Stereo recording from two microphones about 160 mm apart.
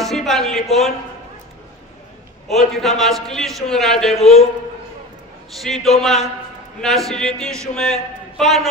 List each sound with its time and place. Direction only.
0.0 s a sound: centre (ahead or behind)
2.5 s a man's voice: centre (ahead or behind)
4.2 s a man's voice: 40° left (ahead or behind)
5.6 s a man's voice: centre (ahead or behind)